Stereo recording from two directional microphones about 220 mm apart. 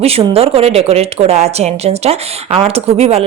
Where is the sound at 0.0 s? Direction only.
25° right (ahead or behind).